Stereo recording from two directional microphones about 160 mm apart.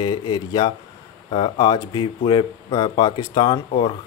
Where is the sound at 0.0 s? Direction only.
30° left (ahead or behind).